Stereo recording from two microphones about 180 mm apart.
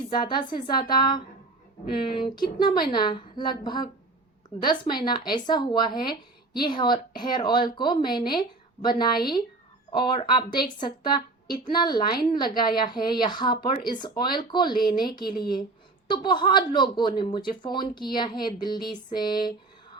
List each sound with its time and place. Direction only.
0.1 s a woman's voice: 25° left (ahead or behind)